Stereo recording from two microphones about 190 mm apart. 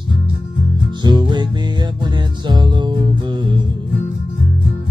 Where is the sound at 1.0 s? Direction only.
25° right (ahead or behind).